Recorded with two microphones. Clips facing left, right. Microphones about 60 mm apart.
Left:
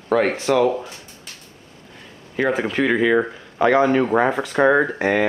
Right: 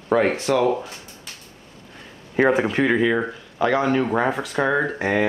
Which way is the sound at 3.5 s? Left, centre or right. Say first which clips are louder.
Left 4 dB; left.